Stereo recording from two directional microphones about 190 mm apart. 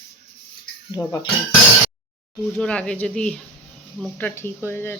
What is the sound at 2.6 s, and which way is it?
Speech, 5° left (ahead or behind).